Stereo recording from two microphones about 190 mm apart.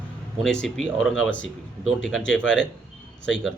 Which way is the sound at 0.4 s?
5° left (ahead or behind).